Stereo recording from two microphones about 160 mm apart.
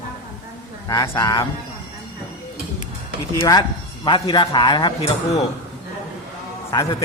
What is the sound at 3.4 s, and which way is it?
Speech, 25° left (ahead or behind).